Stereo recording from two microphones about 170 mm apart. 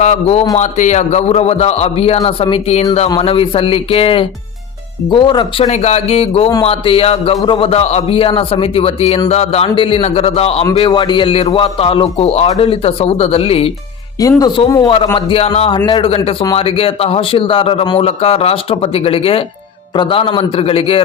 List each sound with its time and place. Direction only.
0.0 s a man's voice: 40° left (ahead or behind)
5.6 s a man's voice: 40° left (ahead or behind)
14.2 s a man's voice: 20° left (ahead or behind)